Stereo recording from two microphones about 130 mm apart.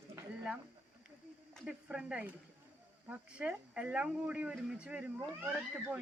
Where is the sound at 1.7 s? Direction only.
10° right (ahead or behind).